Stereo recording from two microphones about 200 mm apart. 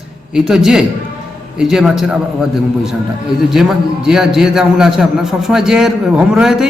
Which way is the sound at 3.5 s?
Centre (ahead or behind).